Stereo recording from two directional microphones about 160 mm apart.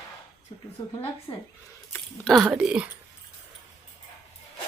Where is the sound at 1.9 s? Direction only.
Centre (ahead or behind).